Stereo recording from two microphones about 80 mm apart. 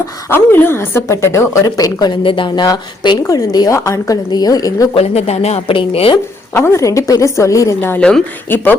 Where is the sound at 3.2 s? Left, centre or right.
Left.